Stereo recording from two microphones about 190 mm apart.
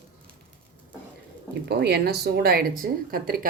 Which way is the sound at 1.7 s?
60° right (ahead or behind).